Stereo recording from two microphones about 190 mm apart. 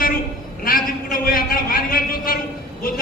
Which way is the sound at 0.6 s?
50° left (ahead or behind).